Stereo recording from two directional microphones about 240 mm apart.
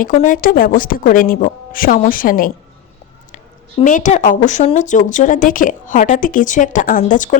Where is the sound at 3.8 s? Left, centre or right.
Left.